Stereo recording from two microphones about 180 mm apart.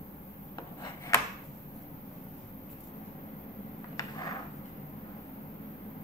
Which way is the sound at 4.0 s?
20° left (ahead or behind).